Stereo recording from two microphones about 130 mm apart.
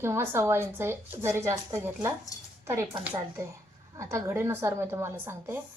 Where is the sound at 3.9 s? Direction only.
20° right (ahead or behind).